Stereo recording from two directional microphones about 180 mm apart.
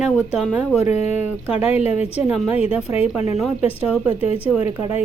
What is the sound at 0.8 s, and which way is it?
Speech, 35° left (ahead or behind).